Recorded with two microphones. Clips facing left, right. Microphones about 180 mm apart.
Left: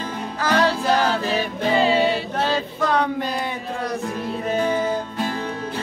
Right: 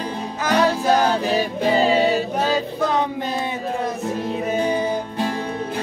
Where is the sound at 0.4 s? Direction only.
20° right (ahead or behind).